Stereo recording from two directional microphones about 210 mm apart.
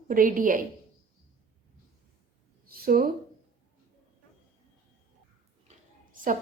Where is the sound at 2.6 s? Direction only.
45° right (ahead or behind).